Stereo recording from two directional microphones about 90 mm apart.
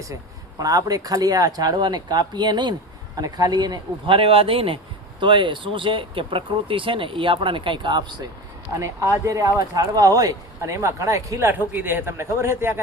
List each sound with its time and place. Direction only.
0.6 s speech: 45° right (ahead or behind)
4.0 s speech: 85° right
5.2 s speech: 65° right (ahead or behind)
8.8 s a man's voice: 35° right (ahead or behind)